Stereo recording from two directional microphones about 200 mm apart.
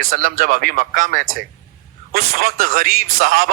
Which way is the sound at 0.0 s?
45° right (ahead or behind).